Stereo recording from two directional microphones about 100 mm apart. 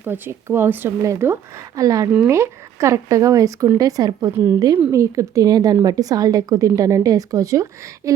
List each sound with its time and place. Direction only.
0.0 s a woman's voice: 25° right (ahead or behind)
4.3 s a woman's voice: 25° right (ahead or behind)